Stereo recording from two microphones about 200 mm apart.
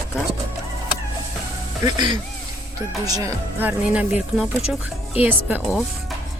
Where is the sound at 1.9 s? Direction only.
20° right (ahead or behind).